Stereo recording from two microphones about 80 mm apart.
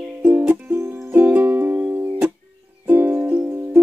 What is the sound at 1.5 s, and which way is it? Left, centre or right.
Music, right.